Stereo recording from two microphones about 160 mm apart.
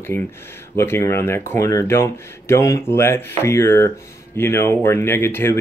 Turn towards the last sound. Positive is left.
turn(degrees=15)  # may be behind; listen again after turning